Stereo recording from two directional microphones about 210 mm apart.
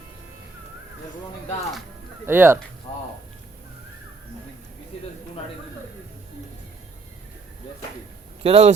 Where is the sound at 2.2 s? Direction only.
10° right (ahead or behind).